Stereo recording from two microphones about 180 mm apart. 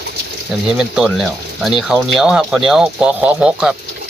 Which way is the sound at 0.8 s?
Centre (ahead or behind).